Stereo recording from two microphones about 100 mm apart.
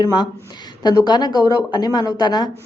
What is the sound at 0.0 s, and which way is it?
Speech, 45° left (ahead or behind).